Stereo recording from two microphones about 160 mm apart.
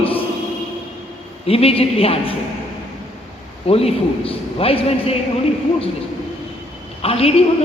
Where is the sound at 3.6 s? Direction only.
40° left (ahead or behind).